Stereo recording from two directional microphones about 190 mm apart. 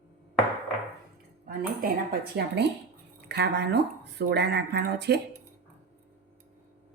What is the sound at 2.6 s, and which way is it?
Speech, 60° right (ahead or behind).